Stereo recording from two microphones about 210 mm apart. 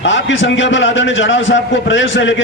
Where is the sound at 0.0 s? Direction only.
60° left (ahead or behind).